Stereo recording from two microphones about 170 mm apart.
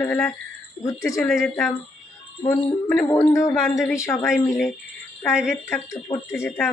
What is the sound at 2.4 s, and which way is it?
Speech, 20° left (ahead or behind).